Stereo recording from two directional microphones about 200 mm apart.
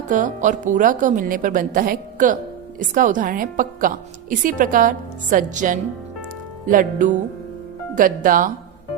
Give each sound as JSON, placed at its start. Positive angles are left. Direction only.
{"t": 0.1, "sound": "a woman's voice", "side_deg": -40}